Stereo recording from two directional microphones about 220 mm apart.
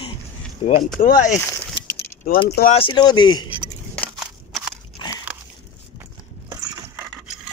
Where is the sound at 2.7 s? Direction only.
20° left (ahead or behind).